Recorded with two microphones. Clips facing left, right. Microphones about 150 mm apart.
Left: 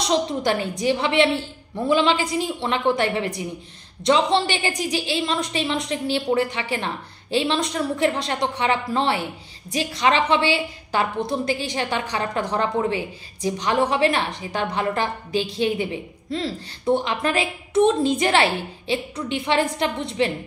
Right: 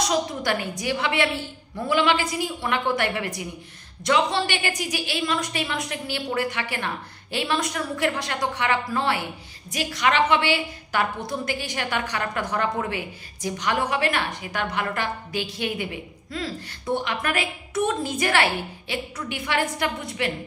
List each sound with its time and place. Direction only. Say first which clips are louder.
0.0 s a woman's voice: left 3 dB; 25° left (ahead or behind)